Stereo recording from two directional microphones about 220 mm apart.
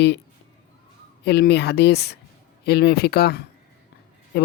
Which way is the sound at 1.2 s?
50° left (ahead or behind).